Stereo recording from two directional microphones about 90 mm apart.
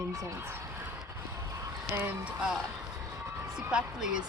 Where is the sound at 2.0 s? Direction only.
20° right (ahead or behind).